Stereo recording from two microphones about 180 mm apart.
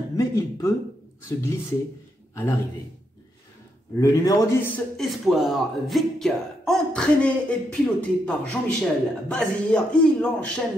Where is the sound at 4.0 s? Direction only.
20° left (ahead or behind).